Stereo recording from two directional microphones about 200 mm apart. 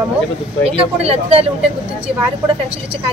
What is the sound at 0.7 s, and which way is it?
Speech, 30° right (ahead or behind).